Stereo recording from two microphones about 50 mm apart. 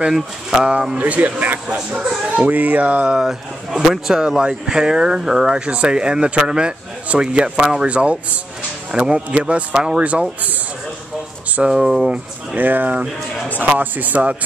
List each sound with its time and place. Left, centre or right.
0.1 s a man's voice: centre
0.9 s speech: right
3.2 s a man's voice: centre
11.7 s a man's voice: centre
12.1 s speech: right